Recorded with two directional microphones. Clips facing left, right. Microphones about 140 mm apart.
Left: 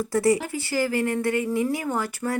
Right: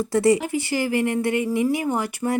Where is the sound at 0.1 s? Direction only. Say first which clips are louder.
Right 3 dB; 20° right (ahead or behind).